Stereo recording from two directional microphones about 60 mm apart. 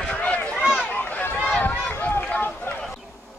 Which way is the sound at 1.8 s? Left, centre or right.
Left.